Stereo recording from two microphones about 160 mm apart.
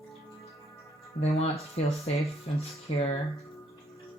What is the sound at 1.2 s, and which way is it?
Speech, 40° left (ahead or behind).